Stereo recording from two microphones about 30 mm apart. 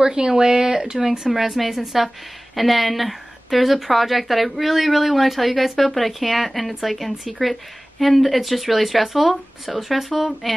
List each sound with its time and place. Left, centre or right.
0.0 s speech: right
1.3 s a woman's voice: centre